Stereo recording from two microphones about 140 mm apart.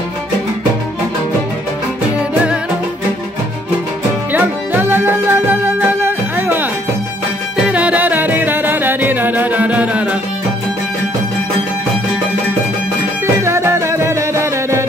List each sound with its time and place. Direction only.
4.3 s music: 15° right (ahead or behind)
7.6 s music: 10° right (ahead or behind)
13.4 s music: 20° right (ahead or behind)